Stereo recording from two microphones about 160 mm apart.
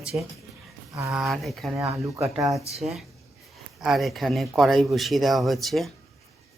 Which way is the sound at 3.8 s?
Centre (ahead or behind).